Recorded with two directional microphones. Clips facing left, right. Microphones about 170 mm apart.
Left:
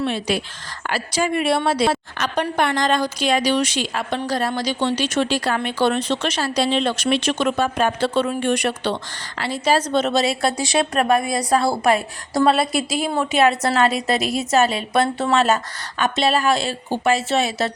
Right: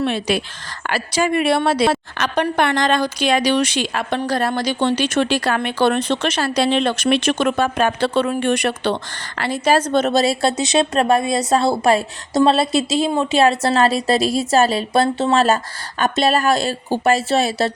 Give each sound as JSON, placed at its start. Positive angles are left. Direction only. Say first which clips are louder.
{"t": 0.0, "sound": "a woman's voice", "louder": "right 2 dB", "side_deg": -65}
{"t": 10.6, "sound": "a woman's voice", "louder": "right 3 dB", "side_deg": -25}